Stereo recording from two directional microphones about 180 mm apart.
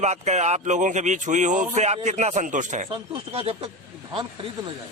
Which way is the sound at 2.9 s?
30° right (ahead or behind).